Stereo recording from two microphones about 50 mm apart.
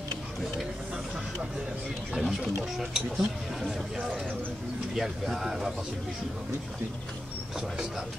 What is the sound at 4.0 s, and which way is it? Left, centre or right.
Speech, right.